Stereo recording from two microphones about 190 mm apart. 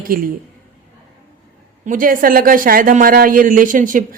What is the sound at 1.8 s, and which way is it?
Speech, 45° right (ahead or behind).